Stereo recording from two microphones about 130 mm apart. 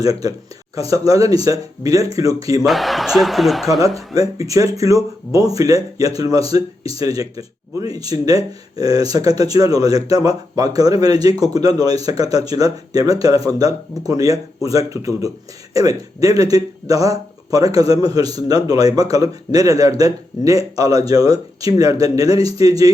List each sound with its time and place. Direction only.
0.0 s speech: 30° right (ahead or behind)
2.6 s speech: centre (ahead or behind)
3.9 s speech: 25° right (ahead or behind)